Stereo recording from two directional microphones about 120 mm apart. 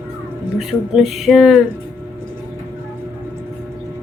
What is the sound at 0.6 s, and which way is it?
Speech, centre (ahead or behind).